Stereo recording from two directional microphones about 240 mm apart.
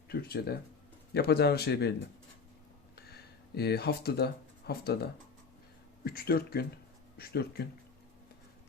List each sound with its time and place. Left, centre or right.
0.1 s speech: left
3.1 s speech: left
6.1 s speech: left